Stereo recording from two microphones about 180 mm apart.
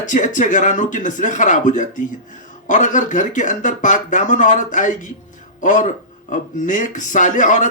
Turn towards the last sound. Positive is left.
turn(degrees=45)  # may be behind; listen again after turning